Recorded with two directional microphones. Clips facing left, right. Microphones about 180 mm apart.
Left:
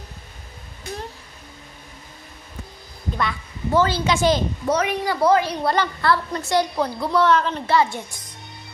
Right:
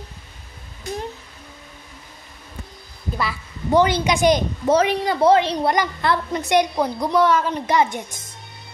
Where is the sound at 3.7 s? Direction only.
15° right (ahead or behind).